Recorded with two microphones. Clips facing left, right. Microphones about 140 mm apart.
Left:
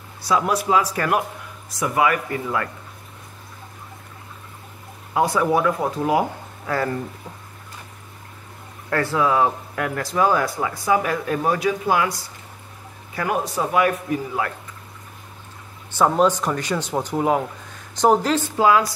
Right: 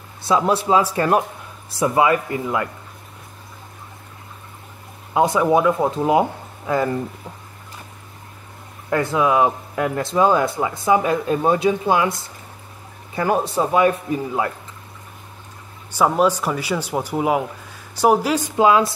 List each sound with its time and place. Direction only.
0.2 s speech: 25° right (ahead or behind)
5.1 s speech: 20° right (ahead or behind)
8.9 s speech: 20° right (ahead or behind)
15.9 s speech: 10° right (ahead or behind)